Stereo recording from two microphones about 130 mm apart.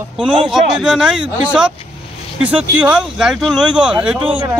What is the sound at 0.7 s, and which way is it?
Speech, 5° right (ahead or behind).